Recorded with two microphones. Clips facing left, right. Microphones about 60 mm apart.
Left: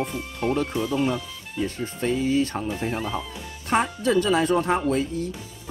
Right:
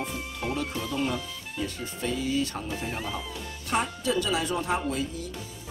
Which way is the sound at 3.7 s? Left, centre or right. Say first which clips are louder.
Left 6 dB; left.